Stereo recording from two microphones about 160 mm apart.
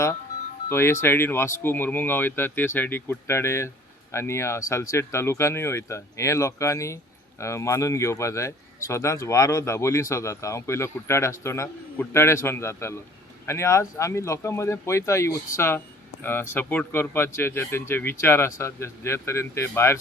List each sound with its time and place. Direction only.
0.7 s speech: 15° left (ahead or behind)